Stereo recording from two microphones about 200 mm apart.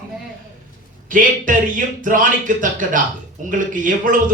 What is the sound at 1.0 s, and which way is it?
A man's voice, 40° right (ahead or behind).